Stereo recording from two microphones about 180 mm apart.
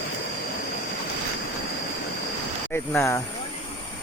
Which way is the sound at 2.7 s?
15° left (ahead or behind).